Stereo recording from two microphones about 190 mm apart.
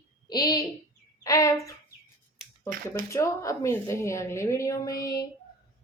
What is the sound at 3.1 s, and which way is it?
A woman's voice, 15° left (ahead or behind).